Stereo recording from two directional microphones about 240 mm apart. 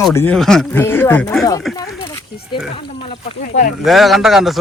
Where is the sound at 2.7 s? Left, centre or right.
Left.